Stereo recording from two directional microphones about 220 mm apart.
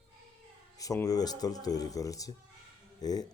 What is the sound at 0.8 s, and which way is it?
Speech, 15° left (ahead or behind).